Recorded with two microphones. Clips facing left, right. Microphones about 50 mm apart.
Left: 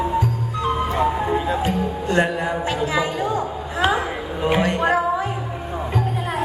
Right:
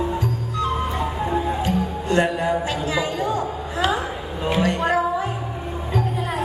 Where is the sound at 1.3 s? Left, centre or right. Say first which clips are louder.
Left 2 dB; left.